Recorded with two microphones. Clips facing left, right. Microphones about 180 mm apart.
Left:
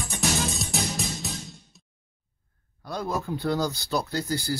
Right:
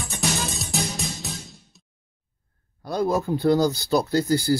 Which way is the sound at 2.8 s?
35° right (ahead or behind).